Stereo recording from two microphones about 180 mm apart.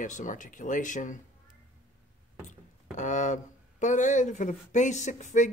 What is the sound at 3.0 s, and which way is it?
Speech, 45° left (ahead or behind).